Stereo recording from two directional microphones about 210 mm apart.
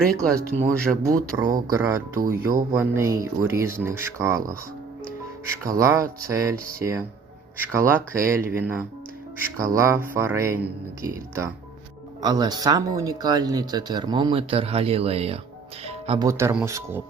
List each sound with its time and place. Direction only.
0.1 s speech: 5° left (ahead or behind)
1.3 s speech: 15° right (ahead or behind)
15.9 s music: 30° right (ahead or behind)
16.2 s speech: 10° right (ahead or behind)